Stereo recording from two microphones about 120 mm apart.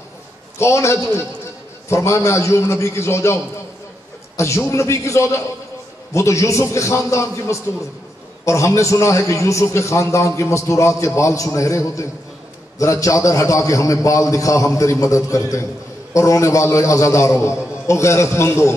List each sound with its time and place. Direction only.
0.6 s a man's voice: 25° left (ahead or behind)
4.4 s a man's voice: 25° left (ahead or behind)